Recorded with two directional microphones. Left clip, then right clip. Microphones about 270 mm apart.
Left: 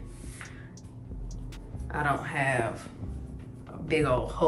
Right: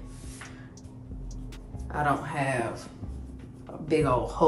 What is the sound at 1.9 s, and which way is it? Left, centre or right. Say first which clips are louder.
Speech: right 2 dB; centre.